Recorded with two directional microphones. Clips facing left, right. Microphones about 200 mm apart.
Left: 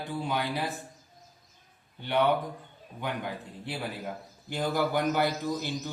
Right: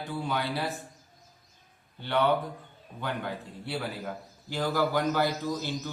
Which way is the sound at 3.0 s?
15° left (ahead or behind).